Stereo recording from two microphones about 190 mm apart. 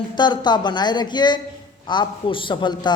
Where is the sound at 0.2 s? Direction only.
25° left (ahead or behind).